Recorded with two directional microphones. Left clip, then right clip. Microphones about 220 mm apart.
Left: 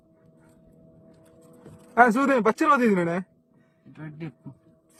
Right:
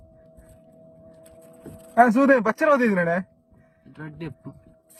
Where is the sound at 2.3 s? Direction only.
Centre (ahead or behind).